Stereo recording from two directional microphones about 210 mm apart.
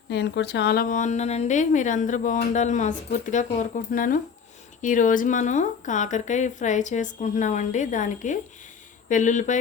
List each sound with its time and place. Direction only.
0.1 s a woman's voice: 55° left (ahead or behind); by 9.6 s 35° left (ahead or behind)